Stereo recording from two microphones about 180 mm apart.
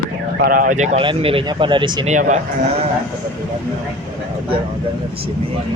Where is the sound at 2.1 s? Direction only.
40° right (ahead or behind).